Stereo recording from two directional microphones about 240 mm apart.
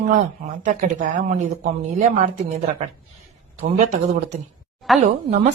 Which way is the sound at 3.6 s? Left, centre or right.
Right.